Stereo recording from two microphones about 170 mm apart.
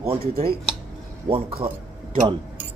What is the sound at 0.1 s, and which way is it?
Speech, 35° right (ahead or behind).